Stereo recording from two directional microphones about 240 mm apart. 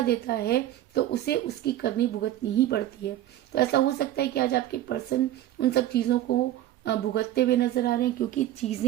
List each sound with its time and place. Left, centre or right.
0.1 s speech: left